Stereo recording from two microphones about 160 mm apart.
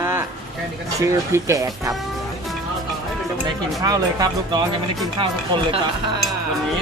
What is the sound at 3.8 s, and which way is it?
Speech, 25° right (ahead or behind).